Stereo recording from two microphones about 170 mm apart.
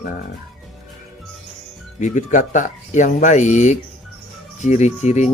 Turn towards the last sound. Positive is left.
turn(degrees=40)  # may be behind; listen again after turning